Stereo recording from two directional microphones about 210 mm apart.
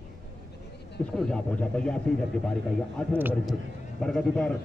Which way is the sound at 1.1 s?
5° left (ahead or behind).